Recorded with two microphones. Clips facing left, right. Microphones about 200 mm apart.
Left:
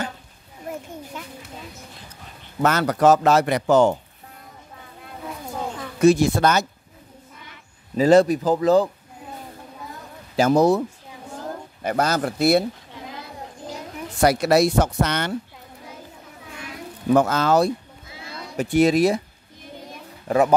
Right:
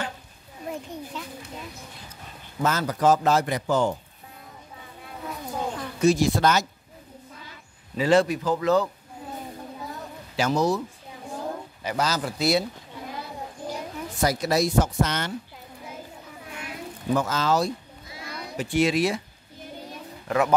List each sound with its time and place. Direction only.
2.6 s a man's voice: 70° left (ahead or behind)
5.9 s speech: 55° left (ahead or behind)
8.0 s speech: 40° left (ahead or behind)
10.3 s speech: 55° left (ahead or behind)
11.8 s speech: 55° left (ahead or behind)
14.2 s a man's voice: 70° left (ahead or behind)
17.1 s speech: 60° left (ahead or behind)
18.1 s a sound: 25° left (ahead or behind)
18.6 s speech: 45° left (ahead or behind)
20.2 s speech: 30° left (ahead or behind)